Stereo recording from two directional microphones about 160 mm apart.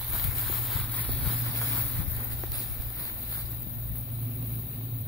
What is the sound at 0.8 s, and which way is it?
Vehicle, 10° left (ahead or behind).